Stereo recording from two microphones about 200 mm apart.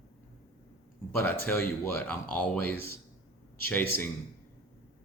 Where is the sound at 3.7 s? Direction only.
10° left (ahead or behind).